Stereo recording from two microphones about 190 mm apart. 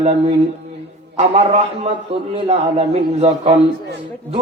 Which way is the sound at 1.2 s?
35° right (ahead or behind).